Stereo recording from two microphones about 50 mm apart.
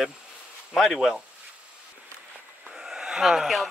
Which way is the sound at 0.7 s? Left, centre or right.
Centre.